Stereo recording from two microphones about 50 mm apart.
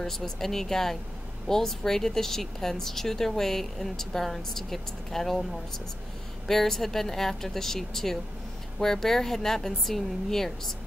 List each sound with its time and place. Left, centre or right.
0.0 s speech: centre